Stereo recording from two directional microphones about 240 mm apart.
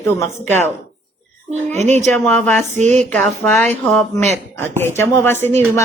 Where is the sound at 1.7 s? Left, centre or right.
Right.